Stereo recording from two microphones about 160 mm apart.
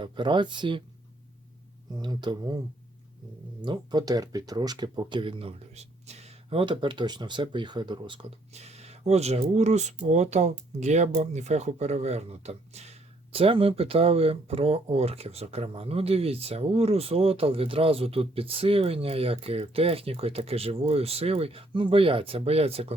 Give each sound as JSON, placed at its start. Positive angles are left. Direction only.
{"t": 0.0, "sound": "speech", "side_deg": -30}
{"t": 1.9, "sound": "speech", "side_deg": -25}
{"t": 8.5, "sound": "speech", "side_deg": -40}